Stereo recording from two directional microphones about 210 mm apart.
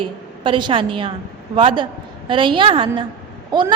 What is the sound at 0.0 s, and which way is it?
A woman's voice, 25° right (ahead or behind).